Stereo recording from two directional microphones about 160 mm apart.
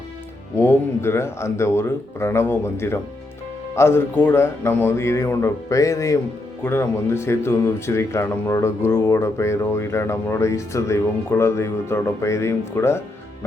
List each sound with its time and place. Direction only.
0.5 s speech: 15° left (ahead or behind)